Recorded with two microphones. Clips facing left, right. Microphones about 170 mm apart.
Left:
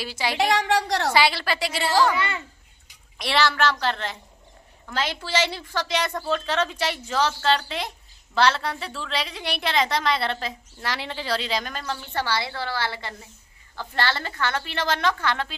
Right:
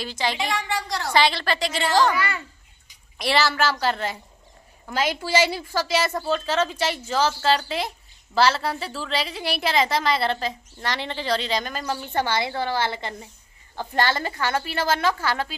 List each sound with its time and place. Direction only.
0.0 s a woman's voice: 10° left (ahead or behind)
0.4 s a woman's voice: 75° left (ahead or behind)
1.1 s a woman's voice: 10° left (ahead or behind)
2.1 s a child's voice: 25° left (ahead or behind)
3.2 s a woman's voice: centre (ahead or behind)
11.8 s a woman's voice: 15° right (ahead or behind)